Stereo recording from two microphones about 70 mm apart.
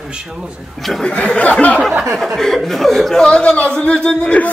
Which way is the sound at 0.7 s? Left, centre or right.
Centre.